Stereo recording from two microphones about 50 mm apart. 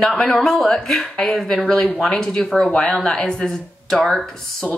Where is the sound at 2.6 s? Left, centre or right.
Centre.